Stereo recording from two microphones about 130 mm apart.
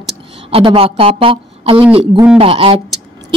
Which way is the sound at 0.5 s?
45° right (ahead or behind).